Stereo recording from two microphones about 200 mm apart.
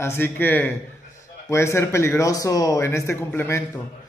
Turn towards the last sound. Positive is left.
turn(degrees=10)  # may be behind; listen again after turning